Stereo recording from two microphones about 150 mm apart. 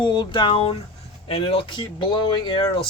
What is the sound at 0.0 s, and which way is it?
Speech, 30° left (ahead or behind).